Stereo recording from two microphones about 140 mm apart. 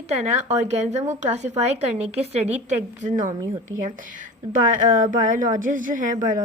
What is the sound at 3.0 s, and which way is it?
Speech, 65° right (ahead or behind).